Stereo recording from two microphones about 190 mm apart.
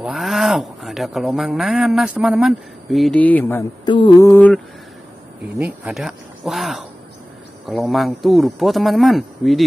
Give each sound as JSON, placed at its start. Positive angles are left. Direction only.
{"t": 0.0, "sound": "speech", "side_deg": 0}
{"t": 3.8, "sound": "mantra", "side_deg": 25}
{"t": 4.3, "sound": "mantra", "side_deg": 10}
{"t": 5.6, "sound": "speech", "side_deg": -5}